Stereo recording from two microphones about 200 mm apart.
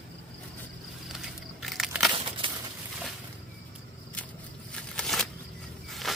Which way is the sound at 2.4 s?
25° right (ahead or behind).